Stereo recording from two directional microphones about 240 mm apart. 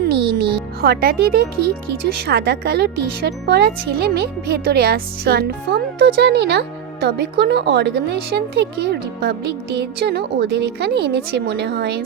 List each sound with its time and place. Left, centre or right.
0.1 s speech: right